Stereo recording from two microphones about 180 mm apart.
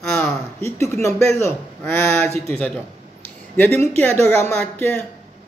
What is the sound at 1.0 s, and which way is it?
Speech, 15° left (ahead or behind).